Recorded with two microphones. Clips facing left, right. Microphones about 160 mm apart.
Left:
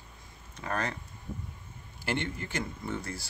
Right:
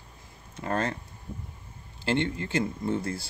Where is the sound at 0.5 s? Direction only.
25° right (ahead or behind).